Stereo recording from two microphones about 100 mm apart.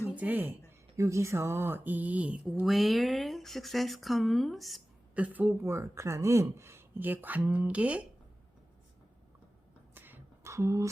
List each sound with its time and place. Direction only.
0.2 s speech: 15° right (ahead or behind)
0.9 s speech: 30° right (ahead or behind); by 2.6 s 10° right (ahead or behind)
2.6 s speech: centre (ahead or behind)
5.1 s speech: 15° right (ahead or behind)
9.9 s a sound: 20° right (ahead or behind)